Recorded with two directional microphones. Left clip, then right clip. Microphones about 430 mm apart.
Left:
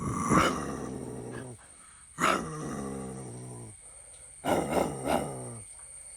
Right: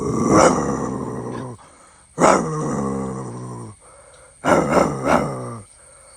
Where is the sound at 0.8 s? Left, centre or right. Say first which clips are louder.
Right 13 dB; right.